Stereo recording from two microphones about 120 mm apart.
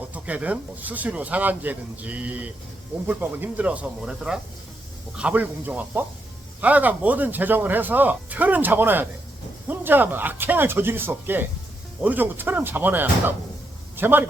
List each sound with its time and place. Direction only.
0.1 s a man's voice: 10° right (ahead or behind)